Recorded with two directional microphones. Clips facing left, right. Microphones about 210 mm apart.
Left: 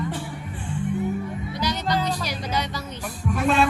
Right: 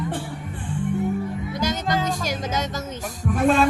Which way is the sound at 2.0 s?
45° right (ahead or behind).